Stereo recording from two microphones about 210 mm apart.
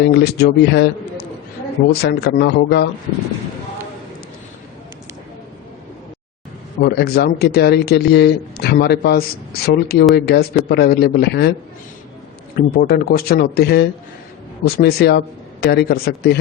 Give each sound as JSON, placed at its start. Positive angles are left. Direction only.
{"t": 0.0, "sound": "a man's voice", "side_deg": 55}
{"t": 6.7, "sound": "a man's voice", "side_deg": 50}
{"t": 12.5, "sound": "a man's voice", "side_deg": 45}